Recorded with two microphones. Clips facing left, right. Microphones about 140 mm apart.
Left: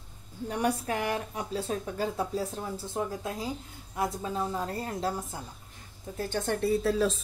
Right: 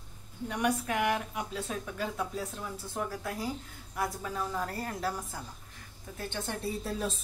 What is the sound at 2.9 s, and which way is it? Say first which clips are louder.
A woman's voice: left 2 dB; 25° left (ahead or behind).